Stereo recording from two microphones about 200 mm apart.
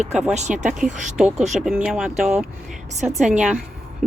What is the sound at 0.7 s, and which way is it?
Speech, 5° right (ahead or behind).